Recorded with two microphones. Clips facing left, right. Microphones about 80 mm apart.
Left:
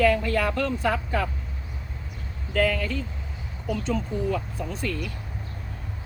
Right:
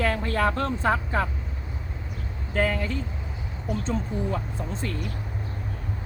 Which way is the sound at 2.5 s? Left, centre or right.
Right.